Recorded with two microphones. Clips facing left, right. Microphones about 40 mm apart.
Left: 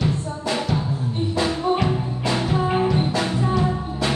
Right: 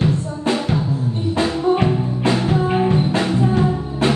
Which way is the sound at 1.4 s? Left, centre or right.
Right.